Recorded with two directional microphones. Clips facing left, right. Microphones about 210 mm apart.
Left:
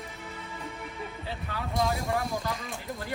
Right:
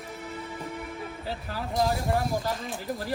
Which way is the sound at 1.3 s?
35° right (ahead or behind).